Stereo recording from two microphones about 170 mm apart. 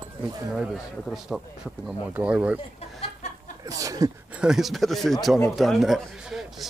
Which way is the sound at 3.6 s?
20° right (ahead or behind).